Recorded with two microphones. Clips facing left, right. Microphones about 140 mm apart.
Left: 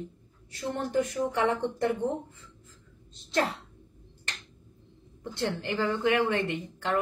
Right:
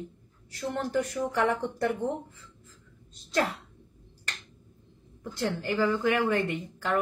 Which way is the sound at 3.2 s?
25° left (ahead or behind).